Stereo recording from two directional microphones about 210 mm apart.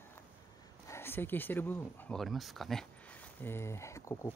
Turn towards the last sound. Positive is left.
turn(degrees=15)  # may be behind; listen again after turning